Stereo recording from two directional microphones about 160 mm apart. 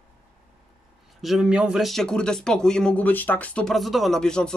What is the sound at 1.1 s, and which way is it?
Speech, centre (ahead or behind).